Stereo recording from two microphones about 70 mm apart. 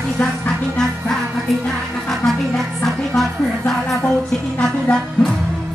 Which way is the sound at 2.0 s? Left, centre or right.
Centre.